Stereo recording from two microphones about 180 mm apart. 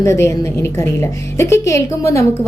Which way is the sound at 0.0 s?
15° left (ahead or behind).